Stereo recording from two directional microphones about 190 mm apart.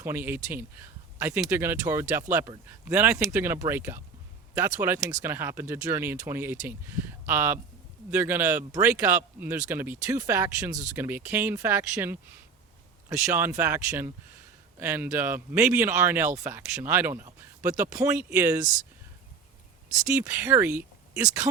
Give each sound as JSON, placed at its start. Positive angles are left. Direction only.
{"t": 0.0, "sound": "speech", "side_deg": -10}
{"t": 2.9, "sound": "speech", "side_deg": -10}
{"t": 17.2, "sound": "a sound", "side_deg": -15}
{"t": 17.9, "sound": "speech", "side_deg": -10}
{"t": 20.1, "sound": "speech", "side_deg": -15}